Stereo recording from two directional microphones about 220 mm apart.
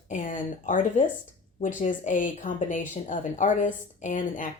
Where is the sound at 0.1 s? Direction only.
35° left (ahead or behind).